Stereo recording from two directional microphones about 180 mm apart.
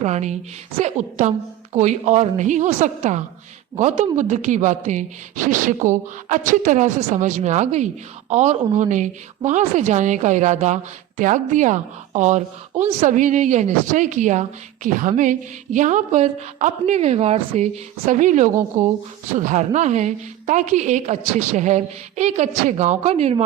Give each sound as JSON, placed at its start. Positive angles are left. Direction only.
{"t": 0.0, "sound": "a woman's voice", "side_deg": -40}